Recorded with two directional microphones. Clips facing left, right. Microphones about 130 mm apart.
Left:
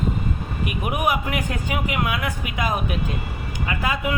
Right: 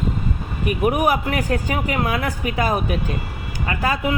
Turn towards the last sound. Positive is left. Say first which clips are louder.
# right 3 dB
turn(degrees=-35)  # may be behind; listen again after turning